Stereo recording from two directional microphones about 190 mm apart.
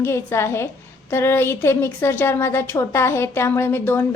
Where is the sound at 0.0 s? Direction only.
15° left (ahead or behind).